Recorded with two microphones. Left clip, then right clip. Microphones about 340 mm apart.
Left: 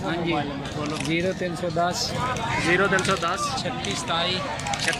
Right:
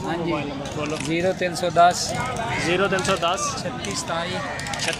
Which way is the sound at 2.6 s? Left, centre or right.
Centre.